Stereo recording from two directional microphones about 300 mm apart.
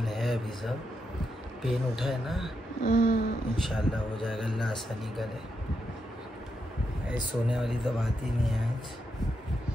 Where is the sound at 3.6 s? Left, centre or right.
Centre.